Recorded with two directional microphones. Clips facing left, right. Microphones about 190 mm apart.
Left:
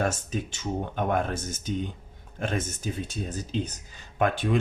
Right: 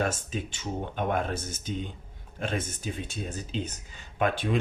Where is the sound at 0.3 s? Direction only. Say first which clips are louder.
Left 3 dB; 45° left (ahead or behind).